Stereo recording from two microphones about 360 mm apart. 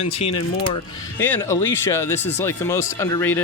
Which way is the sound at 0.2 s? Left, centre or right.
Centre.